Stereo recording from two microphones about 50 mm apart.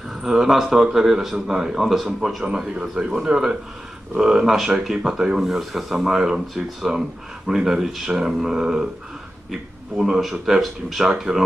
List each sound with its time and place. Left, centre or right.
0.1 s speech: centre
2.7 s speech: right
3.3 s speech: centre